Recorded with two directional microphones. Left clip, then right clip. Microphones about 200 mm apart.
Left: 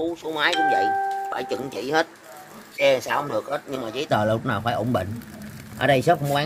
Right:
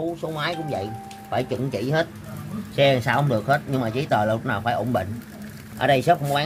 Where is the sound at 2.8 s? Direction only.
40° left (ahead or behind).